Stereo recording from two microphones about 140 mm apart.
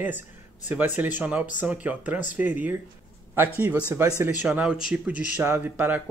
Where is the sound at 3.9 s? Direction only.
15° right (ahead or behind).